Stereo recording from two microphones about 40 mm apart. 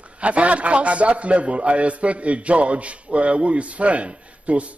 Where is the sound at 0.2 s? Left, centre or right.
Right.